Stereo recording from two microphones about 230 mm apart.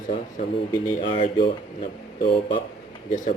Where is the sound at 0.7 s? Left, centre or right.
Left.